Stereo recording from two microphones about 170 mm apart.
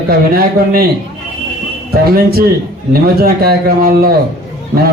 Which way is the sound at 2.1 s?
60° right (ahead or behind).